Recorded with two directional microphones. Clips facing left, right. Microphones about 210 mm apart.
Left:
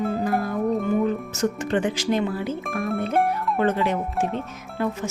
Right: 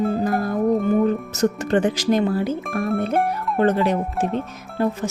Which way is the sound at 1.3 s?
40° right (ahead or behind).